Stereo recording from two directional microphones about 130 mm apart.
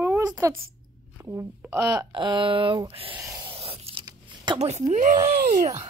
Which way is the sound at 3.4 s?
45° right (ahead or behind).